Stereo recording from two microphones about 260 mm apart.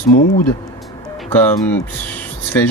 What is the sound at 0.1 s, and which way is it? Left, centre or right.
Speech, left.